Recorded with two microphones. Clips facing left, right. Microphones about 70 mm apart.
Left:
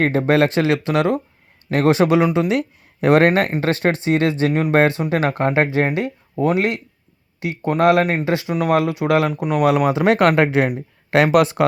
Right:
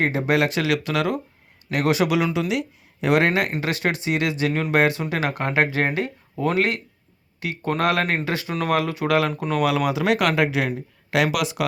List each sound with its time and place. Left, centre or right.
0.0 s speech: left
2.5 s speech: left
9.3 s speech: centre
9.6 s speech: left